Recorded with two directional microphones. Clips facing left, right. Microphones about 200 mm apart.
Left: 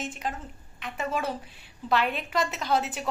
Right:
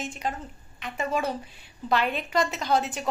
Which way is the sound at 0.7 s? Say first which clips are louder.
Right 2 dB; centre (ahead or behind).